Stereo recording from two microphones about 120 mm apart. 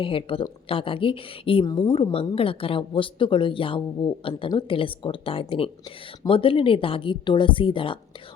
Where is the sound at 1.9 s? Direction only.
50° left (ahead or behind).